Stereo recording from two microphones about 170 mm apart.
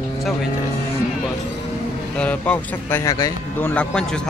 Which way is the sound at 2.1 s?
10° left (ahead or behind).